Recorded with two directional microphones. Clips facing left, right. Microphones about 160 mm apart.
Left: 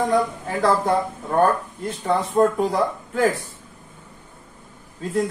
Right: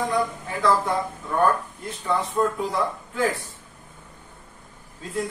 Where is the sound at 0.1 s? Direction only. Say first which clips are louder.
Left 4 dB; 40° left (ahead or behind).